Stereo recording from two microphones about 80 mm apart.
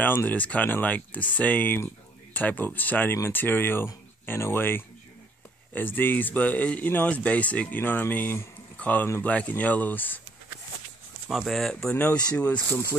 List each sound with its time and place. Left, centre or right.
0.0 s speech: left
11.2 s speech: centre
12.0 s speech: centre